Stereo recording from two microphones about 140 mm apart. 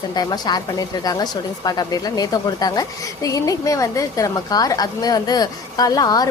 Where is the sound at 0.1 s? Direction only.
30° left (ahead or behind).